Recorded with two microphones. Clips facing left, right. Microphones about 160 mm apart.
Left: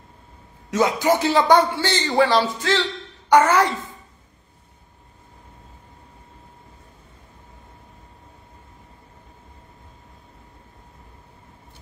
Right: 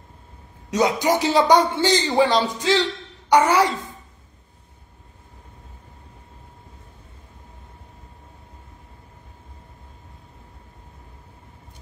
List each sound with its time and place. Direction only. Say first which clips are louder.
0.7 s a man's voice: left 1 dB; 15° right (ahead or behind)